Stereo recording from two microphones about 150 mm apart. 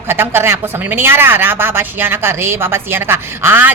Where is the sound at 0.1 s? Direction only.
15° right (ahead or behind).